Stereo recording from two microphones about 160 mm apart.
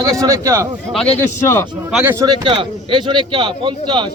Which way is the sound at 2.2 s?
30° right (ahead or behind).